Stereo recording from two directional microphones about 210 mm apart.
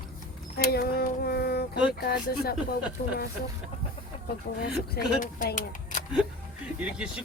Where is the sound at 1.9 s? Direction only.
50° left (ahead or behind).